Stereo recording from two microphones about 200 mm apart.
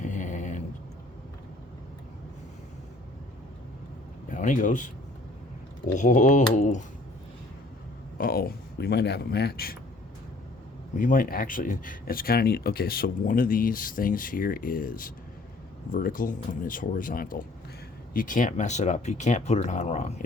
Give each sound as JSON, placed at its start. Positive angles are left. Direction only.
{"t": 0.0, "sound": "a sound", "side_deg": 40}
{"t": 4.3, "sound": "speech", "side_deg": 40}
{"t": 6.0, "sound": "speech", "side_deg": 40}
{"t": 8.2, "sound": "speech", "side_deg": 50}
{"t": 10.9, "sound": "speech", "side_deg": 40}